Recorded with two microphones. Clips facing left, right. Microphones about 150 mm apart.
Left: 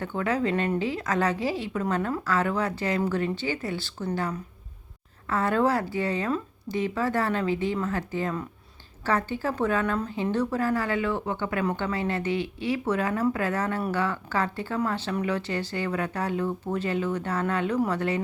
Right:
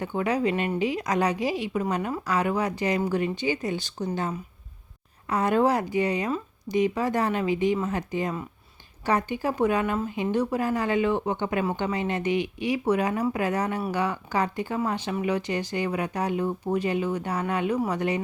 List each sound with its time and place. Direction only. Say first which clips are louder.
0.0 s speech: right 1 dB; 15° right (ahead or behind)